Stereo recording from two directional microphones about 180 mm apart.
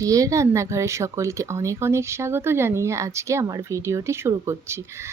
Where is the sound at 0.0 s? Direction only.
20° right (ahead or behind).